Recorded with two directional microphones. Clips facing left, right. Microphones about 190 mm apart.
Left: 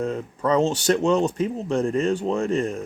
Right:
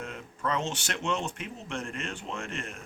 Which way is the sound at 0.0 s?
35° left (ahead or behind).